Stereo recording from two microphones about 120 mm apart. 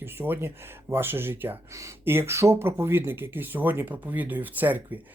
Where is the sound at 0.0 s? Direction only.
20° right (ahead or behind).